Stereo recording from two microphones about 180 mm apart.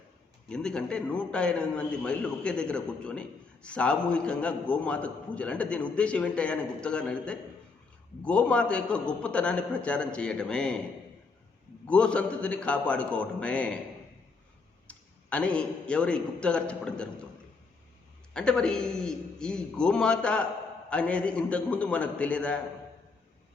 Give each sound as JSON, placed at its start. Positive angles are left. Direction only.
{"t": 0.4, "sound": "a man's voice", "side_deg": 5}
{"t": 11.9, "sound": "a man's voice", "side_deg": 5}
{"t": 14.8, "sound": "a man's voice", "side_deg": 5}
{"t": 18.3, "sound": "a man's voice", "side_deg": 5}